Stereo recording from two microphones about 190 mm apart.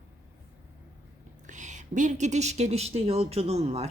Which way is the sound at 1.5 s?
40° right (ahead or behind).